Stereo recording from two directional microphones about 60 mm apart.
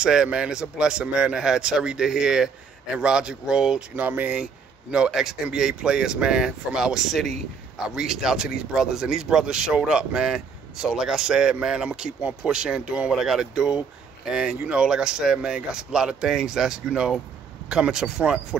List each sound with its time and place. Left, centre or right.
0.0 s speech: centre
3.9 s speech: right
4.9 s speech: centre